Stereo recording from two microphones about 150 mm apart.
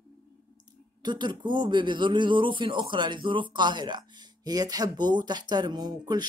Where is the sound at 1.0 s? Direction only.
30° right (ahead or behind).